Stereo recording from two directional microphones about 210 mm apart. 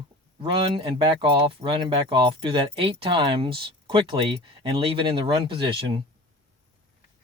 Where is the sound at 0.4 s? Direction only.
25° right (ahead or behind).